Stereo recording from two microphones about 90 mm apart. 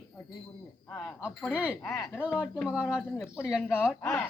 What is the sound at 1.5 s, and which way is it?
Speech, 10° right (ahead or behind).